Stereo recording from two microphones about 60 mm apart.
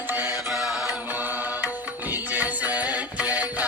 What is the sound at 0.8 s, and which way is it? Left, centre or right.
Music, right.